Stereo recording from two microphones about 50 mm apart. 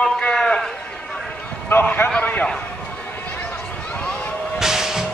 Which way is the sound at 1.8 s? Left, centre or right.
Left.